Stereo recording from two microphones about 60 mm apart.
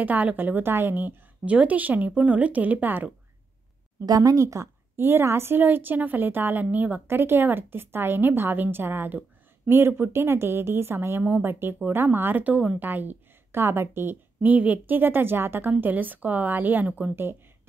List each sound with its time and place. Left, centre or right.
0.0 s a woman's voice: right
4.0 s speech: right
4.9 s a woman's voice: right
7.1 s a woman's voice: right
14.4 s a woman's voice: right